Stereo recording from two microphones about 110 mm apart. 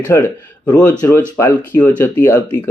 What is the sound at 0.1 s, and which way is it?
Speech, 20° left (ahead or behind).